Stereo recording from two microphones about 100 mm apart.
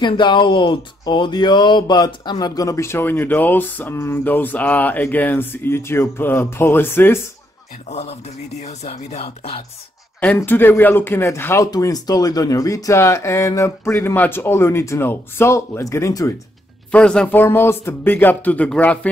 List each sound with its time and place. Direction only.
0.0 s speech: 50° left (ahead or behind); by 7.2 s 20° left (ahead or behind)
7.9 s a man's voice: 90° left
10.2 s speech: 20° left (ahead or behind)
11.6 s speech: 35° left (ahead or behind)
16.9 s speech: 10° left (ahead or behind)
17.3 s speech: 20° left (ahead or behind)